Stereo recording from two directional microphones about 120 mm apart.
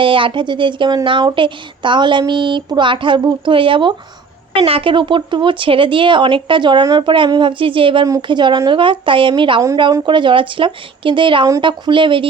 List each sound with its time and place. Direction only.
0.0 s speech: 45° right (ahead or behind)